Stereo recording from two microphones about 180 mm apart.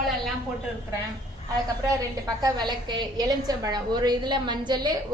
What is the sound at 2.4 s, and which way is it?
A woman's voice, 25° right (ahead or behind).